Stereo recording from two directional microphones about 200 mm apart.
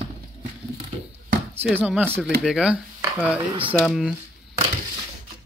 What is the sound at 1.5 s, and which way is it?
Speech, 10° right (ahead or behind).